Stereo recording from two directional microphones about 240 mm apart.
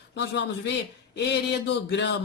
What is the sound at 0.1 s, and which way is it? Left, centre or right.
Speech, left.